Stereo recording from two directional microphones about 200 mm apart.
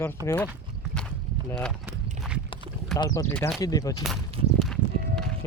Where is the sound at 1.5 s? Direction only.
5° left (ahead or behind).